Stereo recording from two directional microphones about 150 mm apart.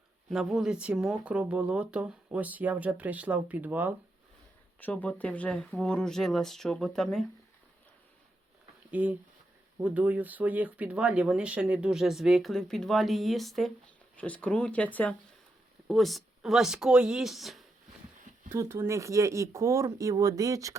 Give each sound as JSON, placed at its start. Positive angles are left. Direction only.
{"t": 0.3, "sound": "speech", "side_deg": 0}
{"t": 4.8, "sound": "speech", "side_deg": 10}
{"t": 8.9, "sound": "speech", "side_deg": -10}
{"t": 18.4, "sound": "speech", "side_deg": -15}